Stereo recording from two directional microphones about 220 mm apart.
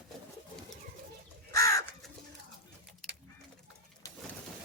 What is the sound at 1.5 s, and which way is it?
Crow, 15° left (ahead or behind).